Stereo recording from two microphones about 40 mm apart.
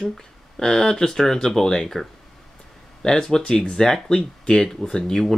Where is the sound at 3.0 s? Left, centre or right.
Centre.